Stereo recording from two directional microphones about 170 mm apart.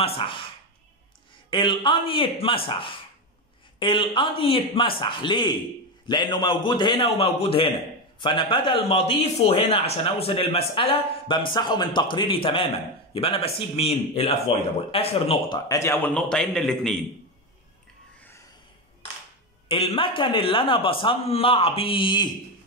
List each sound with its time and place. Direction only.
0.0 s a man's voice: 30° left (ahead or behind)
15.7 s a man's voice: 15° left (ahead or behind)
19.7 s speech: 35° left (ahead or behind)